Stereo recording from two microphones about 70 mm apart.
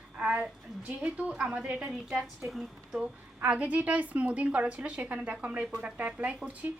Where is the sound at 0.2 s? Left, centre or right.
Centre.